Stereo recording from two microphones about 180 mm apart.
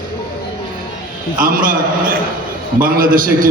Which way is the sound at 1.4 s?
50° right (ahead or behind).